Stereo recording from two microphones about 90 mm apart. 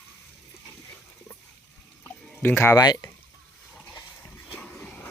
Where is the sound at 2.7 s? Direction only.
45° left (ahead or behind).